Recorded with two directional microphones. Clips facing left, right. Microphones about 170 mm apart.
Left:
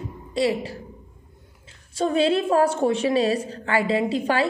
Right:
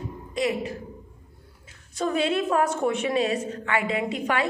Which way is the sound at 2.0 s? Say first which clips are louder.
Left 4 dB; 30° left (ahead or behind).